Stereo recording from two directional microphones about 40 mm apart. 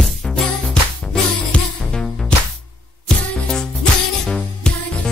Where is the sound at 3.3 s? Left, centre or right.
Centre.